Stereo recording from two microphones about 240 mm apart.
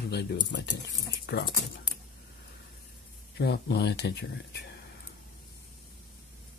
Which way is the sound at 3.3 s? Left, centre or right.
Left.